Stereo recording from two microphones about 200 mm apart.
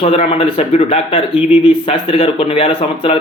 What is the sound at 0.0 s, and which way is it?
Speech, 30° left (ahead or behind).